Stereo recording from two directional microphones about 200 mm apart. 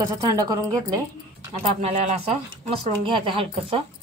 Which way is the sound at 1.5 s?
30° right (ahead or behind).